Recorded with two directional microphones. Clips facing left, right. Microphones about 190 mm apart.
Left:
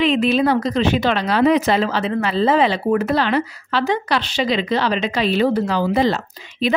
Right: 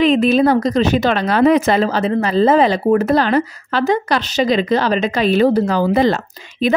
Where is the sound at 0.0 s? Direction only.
45° right (ahead or behind).